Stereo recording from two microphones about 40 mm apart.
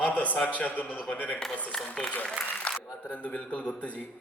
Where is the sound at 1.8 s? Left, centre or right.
Centre.